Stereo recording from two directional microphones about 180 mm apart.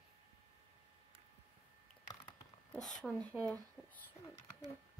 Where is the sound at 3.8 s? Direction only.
20° left (ahead or behind).